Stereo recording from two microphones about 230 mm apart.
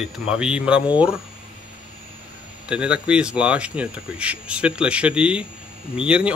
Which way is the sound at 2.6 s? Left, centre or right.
Centre.